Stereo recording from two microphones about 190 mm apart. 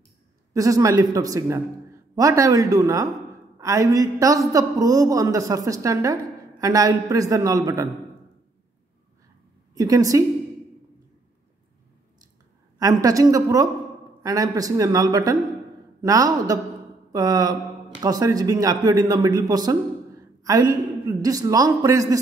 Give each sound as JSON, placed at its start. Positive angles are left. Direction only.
{"t": 0.5, "sound": "a man's voice", "side_deg": -20}
{"t": 9.8, "sound": "speech", "side_deg": -20}
{"t": 12.7, "sound": "a man's voice", "side_deg": -20}